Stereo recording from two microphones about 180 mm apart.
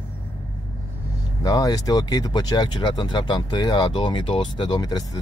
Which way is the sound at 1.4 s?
20° left (ahead or behind).